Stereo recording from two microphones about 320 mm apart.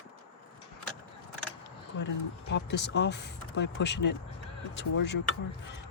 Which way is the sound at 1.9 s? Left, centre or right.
Left.